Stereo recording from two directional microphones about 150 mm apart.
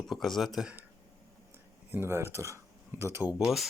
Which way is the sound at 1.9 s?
15° right (ahead or behind).